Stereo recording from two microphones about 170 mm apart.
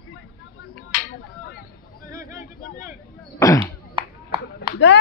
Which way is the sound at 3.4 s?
20° left (ahead or behind).